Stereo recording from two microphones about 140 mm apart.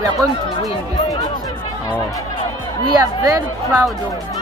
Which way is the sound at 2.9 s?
25° right (ahead or behind).